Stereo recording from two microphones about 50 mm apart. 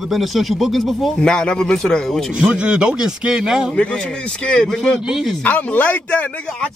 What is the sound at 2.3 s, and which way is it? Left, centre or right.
Speech, centre.